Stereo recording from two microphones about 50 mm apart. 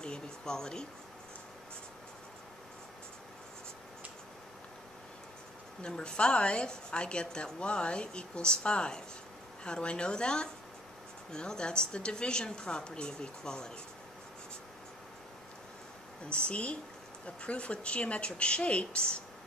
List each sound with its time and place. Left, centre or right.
0.0 s a woman's voice: centre
5.8 s a woman's voice: centre
16.3 s a woman's voice: left